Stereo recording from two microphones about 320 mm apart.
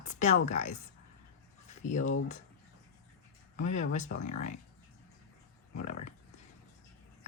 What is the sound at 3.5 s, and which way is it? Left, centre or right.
Speech, left.